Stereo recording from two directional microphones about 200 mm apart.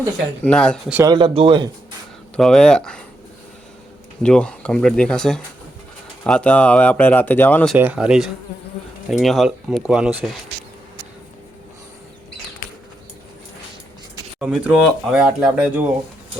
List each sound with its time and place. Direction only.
0.4 s speech: 5° left (ahead or behind)
0.9 s speech: 10° right (ahead or behind)
1.1 s speech: 25° right (ahead or behind)
2.3 s speech: 5° left (ahead or behind)
4.2 s speech: 5° left (ahead or behind)
7.8 s speech: 5° right (ahead or behind)
14.3 s speech: 5° right (ahead or behind)